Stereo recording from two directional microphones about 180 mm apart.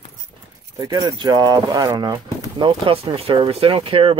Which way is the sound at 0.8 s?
20° right (ahead or behind).